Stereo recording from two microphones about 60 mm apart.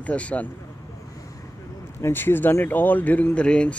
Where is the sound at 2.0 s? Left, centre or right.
Left; by 3.7 s centre.